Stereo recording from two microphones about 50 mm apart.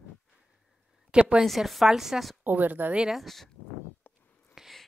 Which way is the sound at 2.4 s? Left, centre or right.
Right.